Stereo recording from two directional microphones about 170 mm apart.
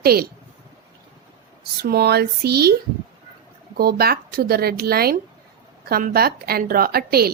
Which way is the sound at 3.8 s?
65° right (ahead or behind).